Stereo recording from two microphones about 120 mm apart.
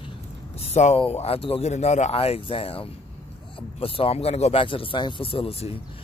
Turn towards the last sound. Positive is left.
turn(degrees=50)  # may be behind; listen again after turning